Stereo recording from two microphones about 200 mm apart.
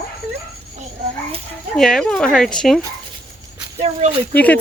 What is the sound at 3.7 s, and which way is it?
Speech, 35° right (ahead or behind).